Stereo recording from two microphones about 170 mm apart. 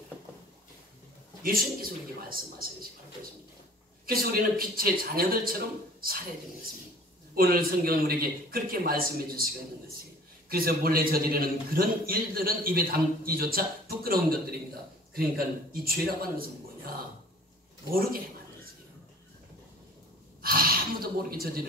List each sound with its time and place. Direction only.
1.4 s a man's voice: 60° right (ahead or behind)
4.0 s a man's voice: 60° right (ahead or behind)
7.3 s a man's voice: 60° right (ahead or behind)
10.5 s a man's voice: 60° right (ahead or behind)
20.4 s speech: 60° right (ahead or behind)